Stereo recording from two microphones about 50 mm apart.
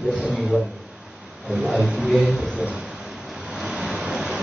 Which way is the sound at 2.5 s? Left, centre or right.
Right.